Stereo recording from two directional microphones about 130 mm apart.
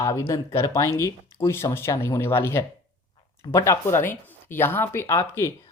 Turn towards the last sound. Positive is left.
turn(degrees=20)  # may be behind; listen again after turning